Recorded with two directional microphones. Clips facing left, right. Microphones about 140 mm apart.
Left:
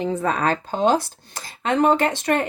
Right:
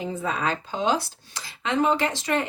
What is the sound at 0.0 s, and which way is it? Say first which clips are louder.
Speech: left 5 dB; 65° left (ahead or behind).